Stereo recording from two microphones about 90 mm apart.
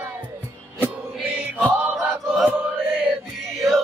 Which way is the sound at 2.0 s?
5° right (ahead or behind).